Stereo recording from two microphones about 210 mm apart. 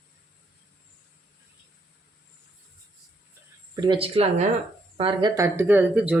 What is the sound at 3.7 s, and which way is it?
Speech, 20° right (ahead or behind).